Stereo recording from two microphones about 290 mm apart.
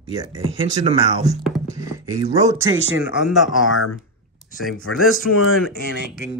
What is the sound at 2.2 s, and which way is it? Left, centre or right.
Speech, centre.